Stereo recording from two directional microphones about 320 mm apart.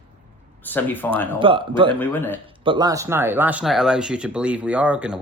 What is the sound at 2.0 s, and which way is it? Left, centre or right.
Speech, centre.